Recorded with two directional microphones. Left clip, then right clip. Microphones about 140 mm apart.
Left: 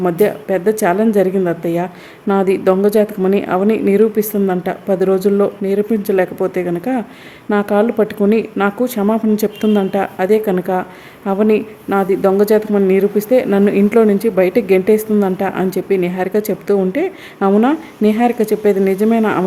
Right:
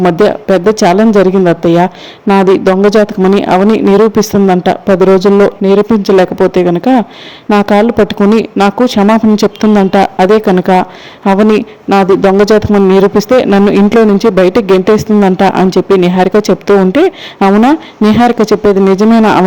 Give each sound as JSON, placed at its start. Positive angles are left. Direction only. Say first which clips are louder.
{"t": 0.0, "sound": "speech", "louder": "right 7 dB", "side_deg": -35}
{"t": 11.9, "sound": "speech", "louder": "right 7 dB", "side_deg": -35}